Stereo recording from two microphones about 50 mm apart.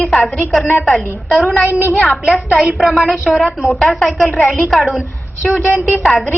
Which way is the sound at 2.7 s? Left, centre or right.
Centre.